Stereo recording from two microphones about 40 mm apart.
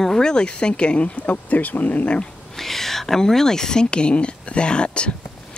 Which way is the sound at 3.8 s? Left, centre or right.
Left.